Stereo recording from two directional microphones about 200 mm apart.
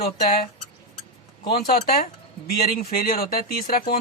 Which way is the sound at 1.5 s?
45° left (ahead or behind).